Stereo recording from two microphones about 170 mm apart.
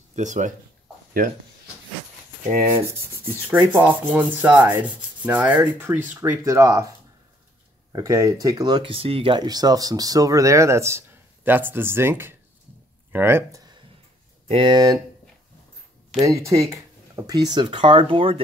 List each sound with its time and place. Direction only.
0.1 s speech: 45° right (ahead or behind)
3.0 s rub: 15° right (ahead or behind)
7.9 s speech: 20° right (ahead or behind)
13.1 s rub: 15° right (ahead or behind)
14.5 s speech: 30° right (ahead or behind)
16.2 s speech: 15° right (ahead or behind)